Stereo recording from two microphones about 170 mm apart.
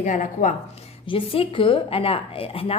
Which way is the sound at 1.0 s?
30° left (ahead or behind).